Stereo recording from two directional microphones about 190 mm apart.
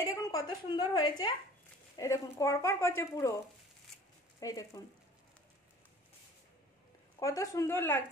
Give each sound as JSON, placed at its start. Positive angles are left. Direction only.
{"t": 0.0, "sound": "a sound", "side_deg": 20}
{"t": 0.7, "sound": "a woman's voice", "side_deg": 20}
{"t": 4.4, "sound": "a woman's voice", "side_deg": 20}
{"t": 7.2, "sound": "speech", "side_deg": 15}